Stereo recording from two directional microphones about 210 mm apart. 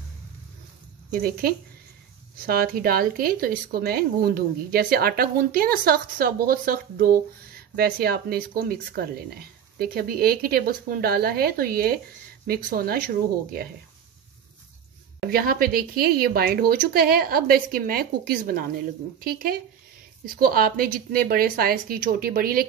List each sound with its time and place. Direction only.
1.2 s speech: 45° right (ahead or behind)
15.1 s speech: 45° right (ahead or behind)